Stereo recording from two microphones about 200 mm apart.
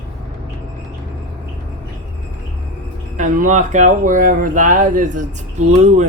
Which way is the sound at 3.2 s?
40° right (ahead or behind).